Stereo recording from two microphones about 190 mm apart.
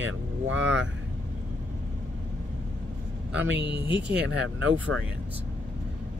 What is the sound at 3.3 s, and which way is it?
Speech, 70° right (ahead or behind).